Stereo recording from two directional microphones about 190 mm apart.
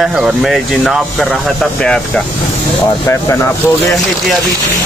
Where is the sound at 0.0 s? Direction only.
Centre (ahead or behind).